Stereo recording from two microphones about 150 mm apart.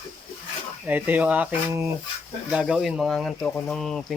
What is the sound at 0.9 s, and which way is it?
Speech, 10° right (ahead or behind).